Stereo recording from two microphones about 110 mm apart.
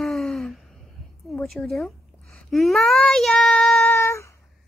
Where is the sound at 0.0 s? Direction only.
5° left (ahead or behind).